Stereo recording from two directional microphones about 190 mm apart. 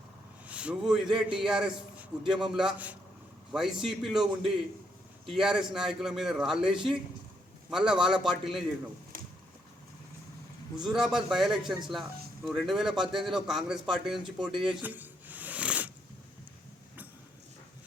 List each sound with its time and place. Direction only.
0.4 s a man's voice: 5° right (ahead or behind)
10.8 s a man's voice: 5° right (ahead or behind)
14.6 s a sound: 5° right (ahead or behind)